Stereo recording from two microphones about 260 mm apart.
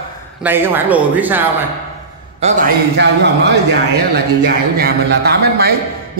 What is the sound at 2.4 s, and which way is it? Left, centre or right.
Speech, right.